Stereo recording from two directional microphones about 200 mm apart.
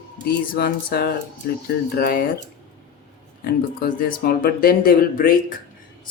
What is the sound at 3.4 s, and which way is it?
Speech, 45° left (ahead or behind).